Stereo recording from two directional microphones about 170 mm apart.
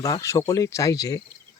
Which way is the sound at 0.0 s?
20° left (ahead or behind).